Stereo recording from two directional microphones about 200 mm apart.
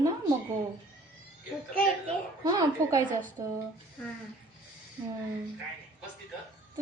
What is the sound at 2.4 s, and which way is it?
A woman's voice, 20° right (ahead or behind).